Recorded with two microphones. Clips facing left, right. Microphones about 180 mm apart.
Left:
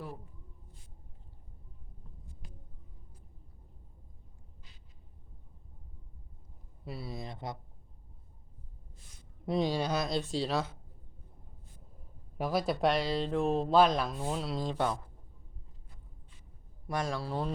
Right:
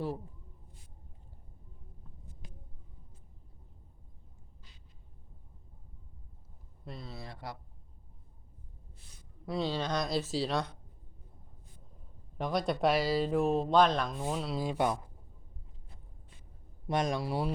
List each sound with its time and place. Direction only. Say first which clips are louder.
6.8 s speech: left 4 dB; 10° left (ahead or behind)
9.5 s speech: left 3 dB; 15° left (ahead or behind)
12.4 s speech: even; 5° left (ahead or behind); by 15.1 s 15° right (ahead or behind)
16.8 s a man's voice: right 3 dB; 20° right (ahead or behind)